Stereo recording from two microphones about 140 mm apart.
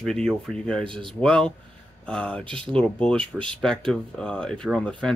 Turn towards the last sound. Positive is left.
turn(degrees=5)  # may be behind; listen again after turning